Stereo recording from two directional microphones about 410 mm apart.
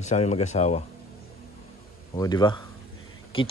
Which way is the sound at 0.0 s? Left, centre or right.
Centre.